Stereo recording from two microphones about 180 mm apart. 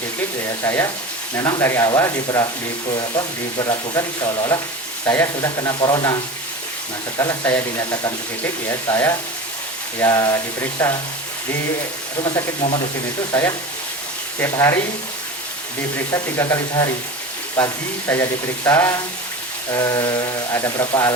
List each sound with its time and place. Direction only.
0.6 s speech: 15° left (ahead or behind)
7.2 s speech: 15° left (ahead or behind)
12.2 s speech: 20° left (ahead or behind)
16.1 s speech: 15° left (ahead or behind)
18.1 s speech: 15° left (ahead or behind)